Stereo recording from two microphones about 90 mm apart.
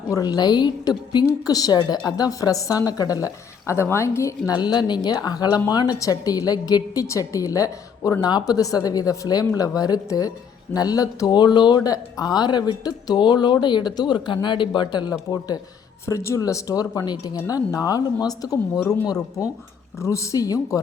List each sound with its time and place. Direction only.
0.1 s a woman's voice: 45° left (ahead or behind)
8.2 s a woman's voice: 50° left (ahead or behind)
16.0 s speech: 30° left (ahead or behind)
20.0 s speech: 35° left (ahead or behind)